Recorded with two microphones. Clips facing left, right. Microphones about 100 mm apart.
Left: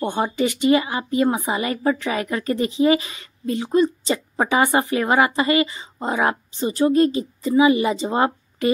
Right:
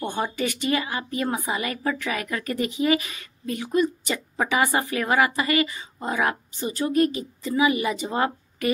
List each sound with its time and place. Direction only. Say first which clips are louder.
0.0 s a woman's voice: left 5 dB; 25° left (ahead or behind)